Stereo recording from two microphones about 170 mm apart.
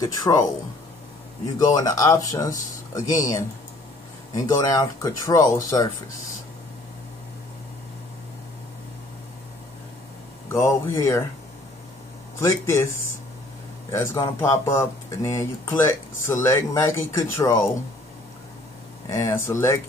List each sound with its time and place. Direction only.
0.0 s speech: 20° left (ahead or behind)
1.8 s speech: 20° left (ahead or behind)
10.5 s speech: 15° left (ahead or behind)
12.4 s speech: 15° left (ahead or behind)
13.9 s speech: 15° left (ahead or behind)
19.0 s speech: 20° left (ahead or behind)